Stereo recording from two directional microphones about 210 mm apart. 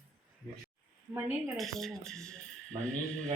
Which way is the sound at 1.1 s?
Centre (ahead or behind).